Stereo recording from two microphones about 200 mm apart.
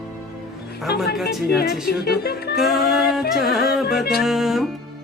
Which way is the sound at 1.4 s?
50° left (ahead or behind).